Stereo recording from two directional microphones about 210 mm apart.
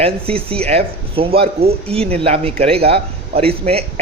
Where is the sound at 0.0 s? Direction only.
25° right (ahead or behind).